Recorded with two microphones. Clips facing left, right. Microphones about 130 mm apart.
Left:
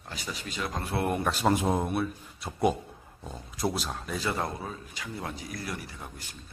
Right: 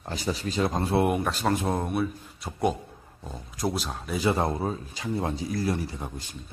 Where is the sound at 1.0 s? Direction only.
5° right (ahead or behind).